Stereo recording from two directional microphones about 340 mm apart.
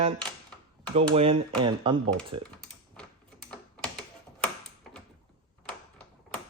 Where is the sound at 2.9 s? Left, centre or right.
Centre.